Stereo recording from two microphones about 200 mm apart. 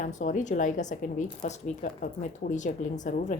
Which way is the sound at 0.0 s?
40° left (ahead or behind).